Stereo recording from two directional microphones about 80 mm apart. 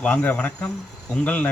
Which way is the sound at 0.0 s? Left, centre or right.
Centre.